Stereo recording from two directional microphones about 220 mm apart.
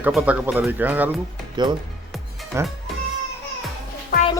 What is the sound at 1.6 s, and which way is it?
Speech, 20° right (ahead or behind).